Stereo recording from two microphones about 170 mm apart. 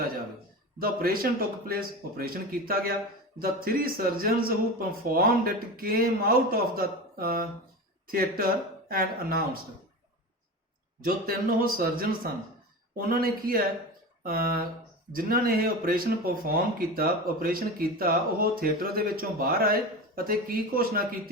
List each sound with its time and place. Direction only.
0.8 s speech: 60° right (ahead or behind)
11.0 s speech: 60° right (ahead or behind)